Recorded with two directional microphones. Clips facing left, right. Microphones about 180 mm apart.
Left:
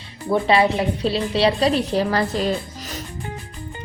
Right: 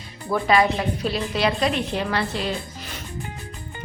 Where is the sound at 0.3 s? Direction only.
25° left (ahead or behind).